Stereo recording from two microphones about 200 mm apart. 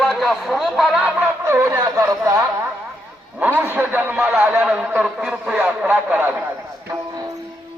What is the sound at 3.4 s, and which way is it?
A man's voice, 10° right (ahead or behind).